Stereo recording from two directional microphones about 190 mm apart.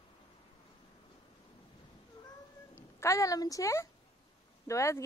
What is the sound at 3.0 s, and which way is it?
A woman's voice, 15° left (ahead or behind).